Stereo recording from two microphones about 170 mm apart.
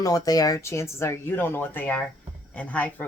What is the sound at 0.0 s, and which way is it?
Speech, 20° left (ahead or behind).